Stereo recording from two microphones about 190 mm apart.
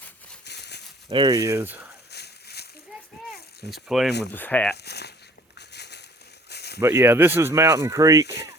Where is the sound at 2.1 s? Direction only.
60° left (ahead or behind).